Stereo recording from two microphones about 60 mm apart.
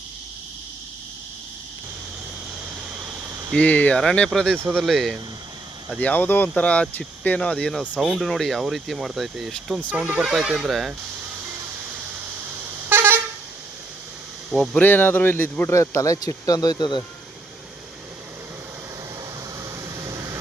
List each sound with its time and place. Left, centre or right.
3.5 s speech: left
4.8 s speech: centre
6.0 s speech: left
6.6 s speech: left
7.9 s speech: centre
9.9 s speech: centre
10.2 s speech: centre
12.9 s vehicle horn: right
14.5 s speech: centre
14.8 s speech: left
15.7 s speech: left